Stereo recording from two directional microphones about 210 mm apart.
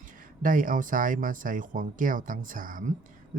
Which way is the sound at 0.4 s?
40° right (ahead or behind).